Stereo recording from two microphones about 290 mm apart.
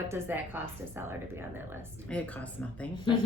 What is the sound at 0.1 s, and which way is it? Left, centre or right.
Speech, centre.